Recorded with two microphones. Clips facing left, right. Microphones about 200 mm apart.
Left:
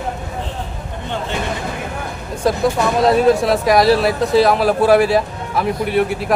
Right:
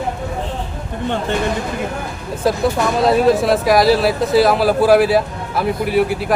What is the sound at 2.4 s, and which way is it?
Speech, 5° right (ahead or behind).